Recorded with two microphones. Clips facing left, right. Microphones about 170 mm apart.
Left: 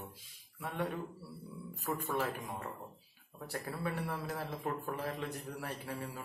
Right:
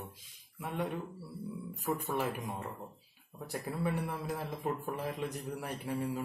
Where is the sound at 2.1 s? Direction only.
20° right (ahead or behind).